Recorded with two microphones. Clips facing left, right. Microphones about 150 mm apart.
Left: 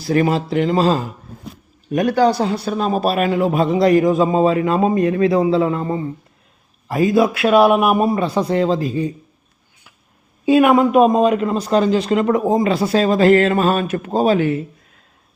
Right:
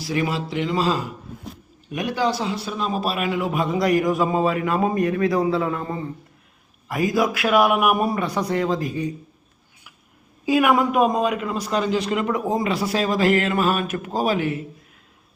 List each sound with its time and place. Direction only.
0.0 s a man's voice: 45° left (ahead or behind); by 9.1 s 25° left (ahead or behind)
10.4 s a man's voice: 25° left (ahead or behind)